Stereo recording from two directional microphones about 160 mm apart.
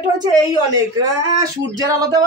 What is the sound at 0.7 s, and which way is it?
Speech, 20° right (ahead or behind).